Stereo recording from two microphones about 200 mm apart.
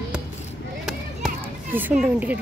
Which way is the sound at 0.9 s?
5° right (ahead or behind).